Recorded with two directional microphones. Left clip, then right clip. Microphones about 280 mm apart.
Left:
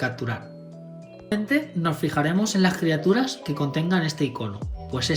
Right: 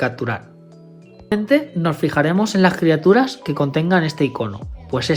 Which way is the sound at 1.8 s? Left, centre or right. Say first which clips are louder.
Right 6 dB; centre.